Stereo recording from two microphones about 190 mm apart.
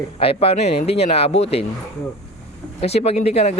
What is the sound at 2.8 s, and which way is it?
Speech, 35° left (ahead or behind).